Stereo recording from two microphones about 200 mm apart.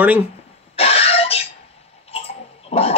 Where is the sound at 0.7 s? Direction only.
30° left (ahead or behind).